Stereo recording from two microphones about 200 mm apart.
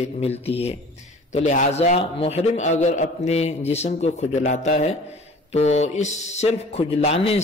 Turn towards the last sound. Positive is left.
turn(degrees=30)  # may be behind; listen again after turning